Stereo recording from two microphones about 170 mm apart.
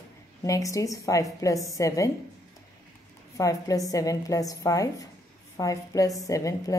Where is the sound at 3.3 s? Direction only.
20° left (ahead or behind).